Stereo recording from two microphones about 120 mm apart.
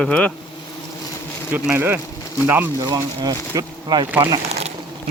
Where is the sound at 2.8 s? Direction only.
35° right (ahead or behind).